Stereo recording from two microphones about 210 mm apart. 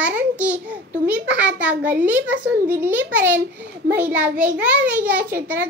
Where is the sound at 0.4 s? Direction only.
5° right (ahead or behind).